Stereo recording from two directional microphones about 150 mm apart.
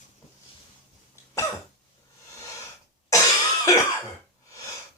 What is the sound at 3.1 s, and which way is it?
Cough, 25° left (ahead or behind).